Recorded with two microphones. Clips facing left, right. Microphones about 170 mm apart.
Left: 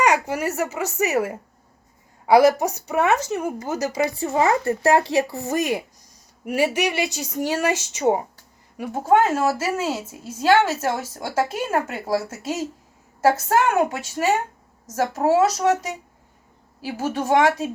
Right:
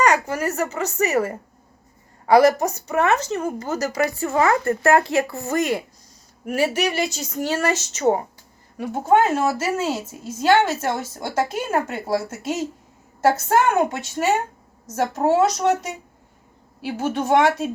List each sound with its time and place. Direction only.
0.0 s a woman's voice: 10° left (ahead or behind)
4.1 s a woman's voice: 30° left (ahead or behind); by 17.7 s centre (ahead or behind)